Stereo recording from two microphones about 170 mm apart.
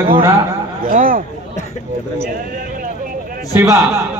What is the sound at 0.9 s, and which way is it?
Speech, 50° right (ahead or behind).